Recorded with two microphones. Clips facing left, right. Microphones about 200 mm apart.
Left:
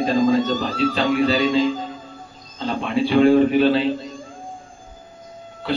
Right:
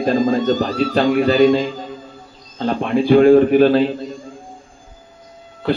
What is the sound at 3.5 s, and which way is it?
Speech, 50° right (ahead or behind).